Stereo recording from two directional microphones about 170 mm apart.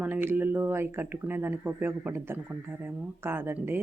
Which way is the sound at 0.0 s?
10° right (ahead or behind).